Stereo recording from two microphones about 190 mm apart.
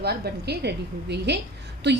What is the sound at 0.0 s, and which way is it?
A woman's voice, 60° right (ahead or behind).